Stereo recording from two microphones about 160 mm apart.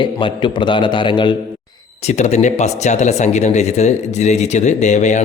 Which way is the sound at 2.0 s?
45° left (ahead or behind).